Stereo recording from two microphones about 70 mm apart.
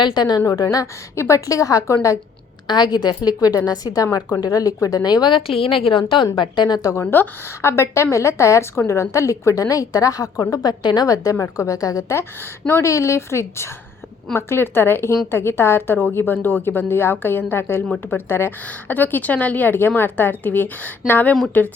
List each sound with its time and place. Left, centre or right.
0.0 s a woman's voice: left
2.6 s a woman's voice: left
3.2 s a woman's voice: left
4.4 s a woman's voice: left
6.2 s a woman's voice: left
7.0 s a woman's voice: left